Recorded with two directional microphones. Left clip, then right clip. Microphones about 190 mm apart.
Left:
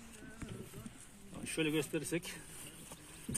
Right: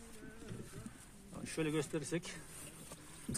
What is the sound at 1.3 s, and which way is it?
Speech, 15° left (ahead or behind).